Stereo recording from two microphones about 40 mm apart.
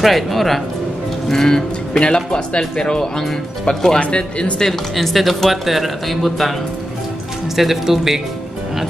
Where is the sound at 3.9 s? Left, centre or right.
Left.